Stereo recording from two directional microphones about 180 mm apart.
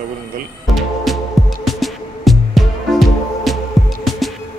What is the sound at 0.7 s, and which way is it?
Music, centre (ahead or behind).